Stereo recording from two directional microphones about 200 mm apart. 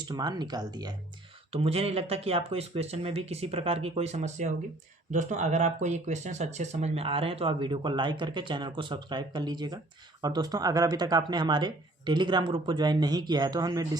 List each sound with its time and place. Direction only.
0.0 s speech: 20° right (ahead or behind)